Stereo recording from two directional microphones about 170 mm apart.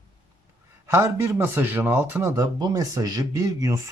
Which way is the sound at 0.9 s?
15° right (ahead or behind).